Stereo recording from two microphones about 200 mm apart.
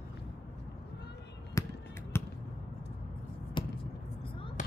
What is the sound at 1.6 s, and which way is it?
Basketball bounce, 15° left (ahead or behind).